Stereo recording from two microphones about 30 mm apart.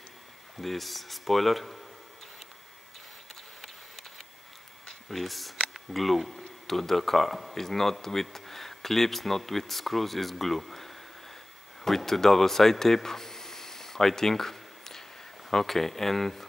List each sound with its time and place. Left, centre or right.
0.6 s speech: centre
5.0 s speech: centre